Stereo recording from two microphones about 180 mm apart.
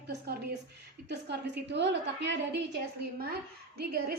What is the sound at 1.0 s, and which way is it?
A woman's voice, 70° right (ahead or behind).